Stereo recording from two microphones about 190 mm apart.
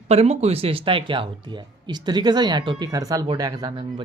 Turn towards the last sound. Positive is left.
turn(degrees=-20)  # may be behind; listen again after turning